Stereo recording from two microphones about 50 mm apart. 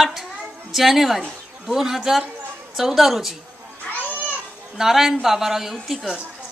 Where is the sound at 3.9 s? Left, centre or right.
Left.